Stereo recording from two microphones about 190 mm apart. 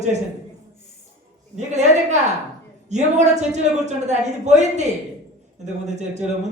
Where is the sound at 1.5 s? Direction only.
40° right (ahead or behind).